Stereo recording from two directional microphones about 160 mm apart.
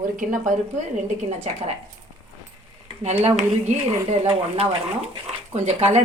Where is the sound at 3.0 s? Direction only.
45° right (ahead or behind).